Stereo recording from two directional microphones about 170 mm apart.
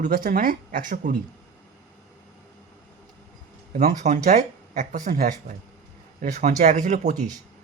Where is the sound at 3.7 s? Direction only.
50° right (ahead or behind).